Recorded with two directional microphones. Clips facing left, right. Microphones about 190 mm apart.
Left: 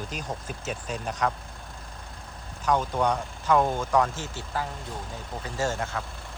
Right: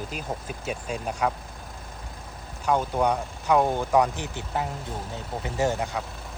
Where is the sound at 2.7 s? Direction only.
10° right (ahead or behind).